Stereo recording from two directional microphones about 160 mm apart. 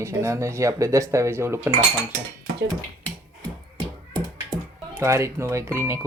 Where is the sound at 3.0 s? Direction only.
25° right (ahead or behind).